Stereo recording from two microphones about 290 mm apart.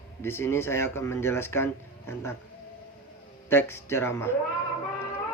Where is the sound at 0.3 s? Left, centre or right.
Centre.